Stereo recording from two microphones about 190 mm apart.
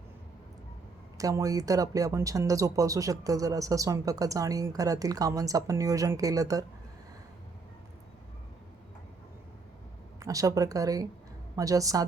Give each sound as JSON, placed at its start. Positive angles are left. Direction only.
{"t": 1.2, "sound": "speech", "side_deg": -20}
{"t": 10.2, "sound": "speech", "side_deg": -15}